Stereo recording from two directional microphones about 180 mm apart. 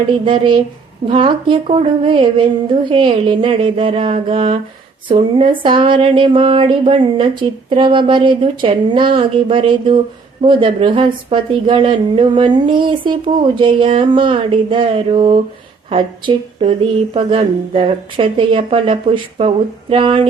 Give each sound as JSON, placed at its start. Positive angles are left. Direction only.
{"t": 0.3, "sound": "speech", "side_deg": -25}